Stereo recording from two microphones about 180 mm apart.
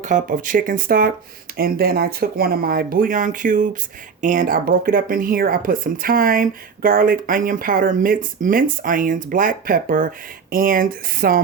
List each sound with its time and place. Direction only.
0.0 s speech: 45° right (ahead or behind)